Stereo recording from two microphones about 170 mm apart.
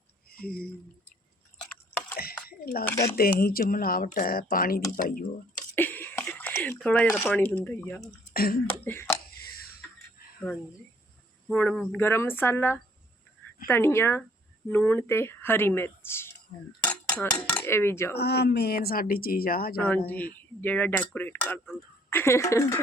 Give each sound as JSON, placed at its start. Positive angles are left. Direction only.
{"t": 0.3, "sound": "speech", "side_deg": 60}
{"t": 2.1, "sound": "a sound", "side_deg": 60}
{"t": 3.0, "sound": "speech", "side_deg": 60}
{"t": 5.7, "sound": "a sound", "side_deg": 10}
{"t": 6.7, "sound": "speech", "side_deg": 5}
{"t": 8.3, "sound": "speech", "side_deg": 65}
{"t": 8.7, "sound": "speech", "side_deg": 15}
{"t": 11.4, "sound": "speech", "side_deg": 5}
{"t": 16.8, "sound": "dishes", "side_deg": 5}
{"t": 17.6, "sound": "speech", "side_deg": 15}
{"t": 18.2, "sound": "speech", "side_deg": 75}
{"t": 20.1, "sound": "speech", "side_deg": 10}